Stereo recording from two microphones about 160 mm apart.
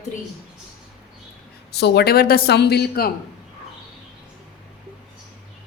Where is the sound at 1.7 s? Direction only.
90° left.